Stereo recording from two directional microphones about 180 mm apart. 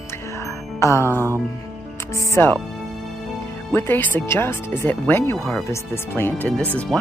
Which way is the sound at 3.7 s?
10° left (ahead or behind).